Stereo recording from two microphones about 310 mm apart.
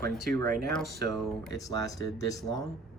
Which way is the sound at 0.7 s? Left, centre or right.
Centre.